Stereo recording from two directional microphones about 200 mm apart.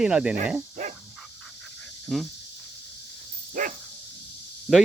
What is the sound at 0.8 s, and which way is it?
Dog, 35° right (ahead or behind).